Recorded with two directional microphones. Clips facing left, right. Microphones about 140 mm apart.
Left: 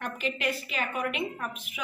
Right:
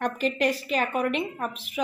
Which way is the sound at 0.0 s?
40° right (ahead or behind).